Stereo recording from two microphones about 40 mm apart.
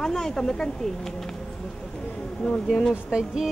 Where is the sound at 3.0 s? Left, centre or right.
Centre.